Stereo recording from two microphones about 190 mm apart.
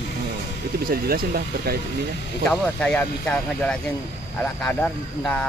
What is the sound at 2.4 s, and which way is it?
Speech, 5° left (ahead or behind).